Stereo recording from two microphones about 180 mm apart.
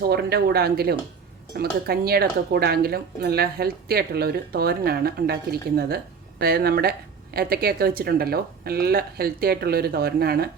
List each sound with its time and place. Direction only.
0.0 s speech: 60° right (ahead or behind)